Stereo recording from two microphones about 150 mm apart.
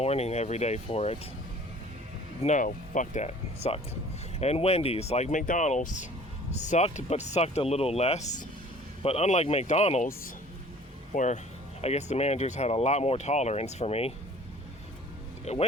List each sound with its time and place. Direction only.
0.0 s speech: 45° left (ahead or behind)
2.4 s speech: 55° left (ahead or behind)
11.1 s speech: 55° left (ahead or behind)
15.5 s speech: 50° left (ahead or behind)